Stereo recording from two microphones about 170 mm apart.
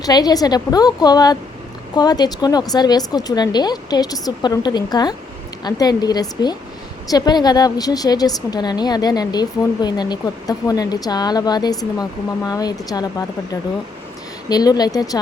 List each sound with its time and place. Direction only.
0.0 s a woman's voice: 25° left (ahead or behind)